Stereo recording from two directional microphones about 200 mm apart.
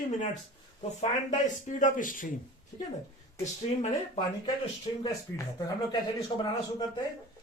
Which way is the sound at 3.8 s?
35° left (ahead or behind).